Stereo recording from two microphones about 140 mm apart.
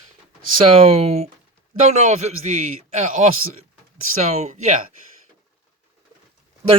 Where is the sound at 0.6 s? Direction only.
45° right (ahead or behind).